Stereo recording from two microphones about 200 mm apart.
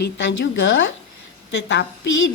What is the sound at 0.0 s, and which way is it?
A woman's voice, 65° left (ahead or behind).